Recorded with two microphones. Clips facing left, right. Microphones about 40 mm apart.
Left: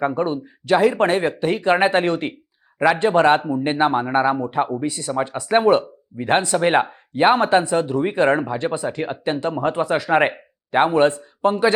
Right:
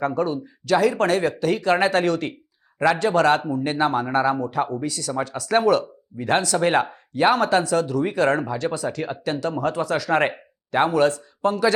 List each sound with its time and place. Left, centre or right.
0.0 s speech: left